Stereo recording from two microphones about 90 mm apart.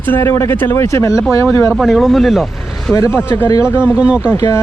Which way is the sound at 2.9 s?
35° left (ahead or behind).